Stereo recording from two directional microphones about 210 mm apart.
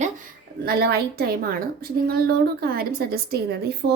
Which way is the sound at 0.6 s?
45° right (ahead or behind).